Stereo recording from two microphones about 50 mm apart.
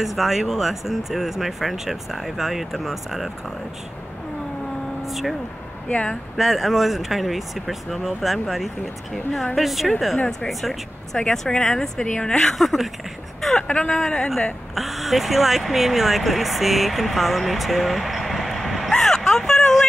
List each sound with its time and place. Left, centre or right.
0.0 s speech: centre
5.0 s speech: centre
5.9 s speech: left
6.3 s a woman's voice: centre
13.4 s a sound: centre
13.7 s speech: left
14.8 s speech: centre
18.9 s vehicle: centre